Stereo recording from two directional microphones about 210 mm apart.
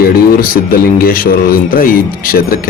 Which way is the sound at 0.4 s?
45° left (ahead or behind).